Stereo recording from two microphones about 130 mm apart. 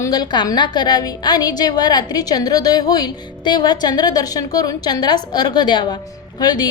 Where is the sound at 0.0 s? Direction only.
30° left (ahead or behind).